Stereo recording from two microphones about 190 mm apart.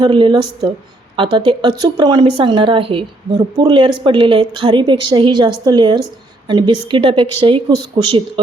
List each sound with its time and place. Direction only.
0.0 s a woman's voice: 25° right (ahead or behind)